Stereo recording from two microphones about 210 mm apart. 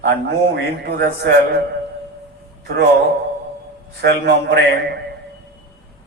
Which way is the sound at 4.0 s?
55° right (ahead or behind).